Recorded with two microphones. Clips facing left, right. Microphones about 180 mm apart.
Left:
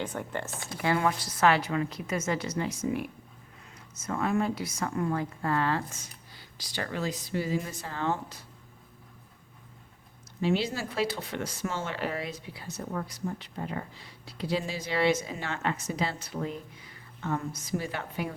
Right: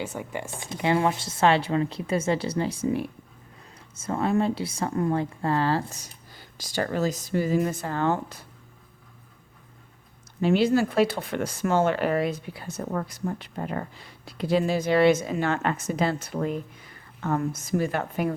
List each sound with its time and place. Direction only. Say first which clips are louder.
0.0 s speech: right 2 dB; 10° right (ahead or behind)
0.6 s a woman's voice: right 4 dB; 20° right (ahead or behind); by 8.4 s 55° right (ahead or behind)
10.4 s a woman's voice: right 8 dB; 55° right (ahead or behind)